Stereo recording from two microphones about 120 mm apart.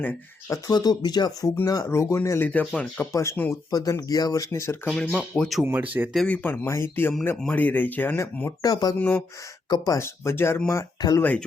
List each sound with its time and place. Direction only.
0.0 s speech: 25° left (ahead or behind)
0.7 s speech: 35° left (ahead or behind)
2.5 s speech: 10° left (ahead or behind)
3.7 s speech: 30° left (ahead or behind)
5.1 s speech: 5° left (ahead or behind)
5.6 s speech: 15° right (ahead or behind)
6.1 s speech: 10° left (ahead or behind); by 9.0 s 30° left (ahead or behind)
9.0 s speech: 15° left (ahead or behind)
9.6 s speech: 35° left (ahead or behind)
10.0 s speech: 20° left (ahead or behind)